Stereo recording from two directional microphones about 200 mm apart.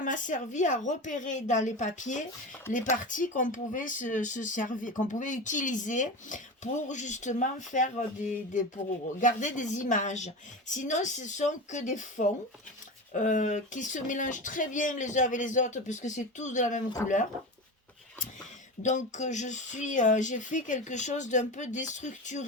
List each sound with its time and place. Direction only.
0.0 s speech: 40° left (ahead or behind)
18.8 s speech: 35° left (ahead or behind)